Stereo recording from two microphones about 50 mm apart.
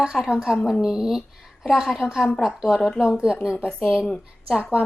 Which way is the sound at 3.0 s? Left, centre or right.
Centre.